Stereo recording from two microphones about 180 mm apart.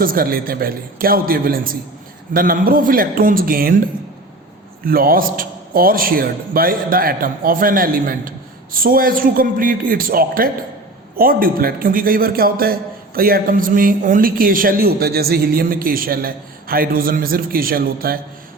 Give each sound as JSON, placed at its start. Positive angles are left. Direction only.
{"t": 0.0, "sound": "a man's voice", "side_deg": -55}
{"t": 4.9, "sound": "a man's voice", "side_deg": -55}